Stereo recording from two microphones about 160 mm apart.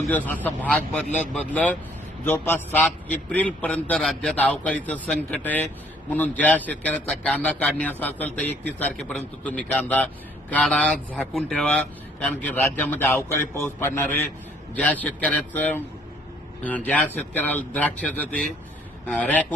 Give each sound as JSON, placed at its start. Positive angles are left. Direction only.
{"t": 0.1, "sound": "speech", "side_deg": 10}